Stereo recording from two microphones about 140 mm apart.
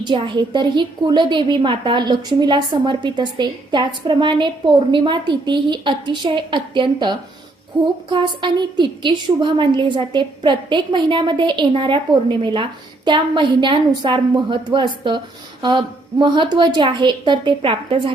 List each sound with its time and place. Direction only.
0.0 s a woman's voice: 35° right (ahead or behind)